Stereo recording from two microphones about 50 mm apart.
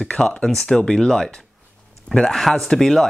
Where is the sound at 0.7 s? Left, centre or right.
Centre.